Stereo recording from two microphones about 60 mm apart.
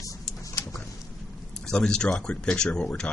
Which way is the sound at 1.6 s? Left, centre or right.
Centre.